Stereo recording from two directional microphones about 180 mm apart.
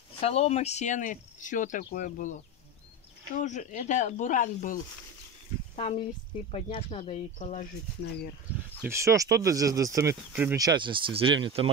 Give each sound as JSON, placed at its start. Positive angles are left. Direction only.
{"t": 0.2, "sound": "speech", "side_deg": 35}
{"t": 3.3, "sound": "speech", "side_deg": 45}
{"t": 5.8, "sound": "speech", "side_deg": 30}
{"t": 8.8, "sound": "speech", "side_deg": -15}
{"t": 10.6, "sound": "speech", "side_deg": -25}